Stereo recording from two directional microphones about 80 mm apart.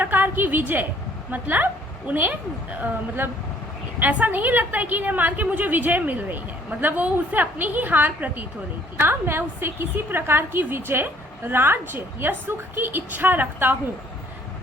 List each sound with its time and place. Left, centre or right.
0.0 s a woman's voice: right
4.0 s a woman's voice: right